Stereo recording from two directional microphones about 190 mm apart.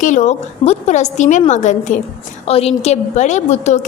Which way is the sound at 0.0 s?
40° left (ahead or behind).